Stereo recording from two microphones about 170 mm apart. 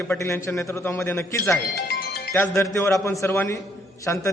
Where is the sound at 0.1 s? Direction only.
15° left (ahead or behind).